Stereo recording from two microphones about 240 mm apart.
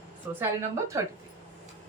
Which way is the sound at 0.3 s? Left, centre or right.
Centre.